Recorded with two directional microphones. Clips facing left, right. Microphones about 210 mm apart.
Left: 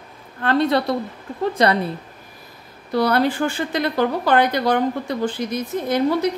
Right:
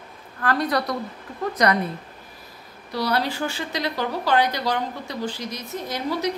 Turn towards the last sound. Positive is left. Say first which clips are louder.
# left 8 dB
turn(degrees=55)  # may be behind; listen again after turning